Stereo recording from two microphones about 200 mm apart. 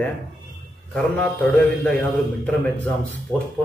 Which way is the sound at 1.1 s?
5° left (ahead or behind).